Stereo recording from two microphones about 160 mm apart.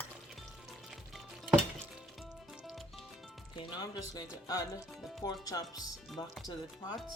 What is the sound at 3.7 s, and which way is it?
Speech, 20° left (ahead or behind).